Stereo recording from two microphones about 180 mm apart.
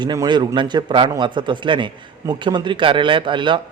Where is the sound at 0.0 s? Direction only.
25° right (ahead or behind).